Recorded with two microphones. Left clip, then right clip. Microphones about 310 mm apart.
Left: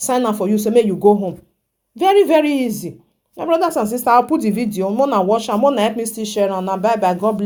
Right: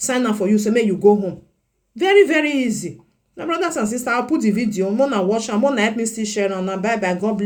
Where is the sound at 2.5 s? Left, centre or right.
Centre.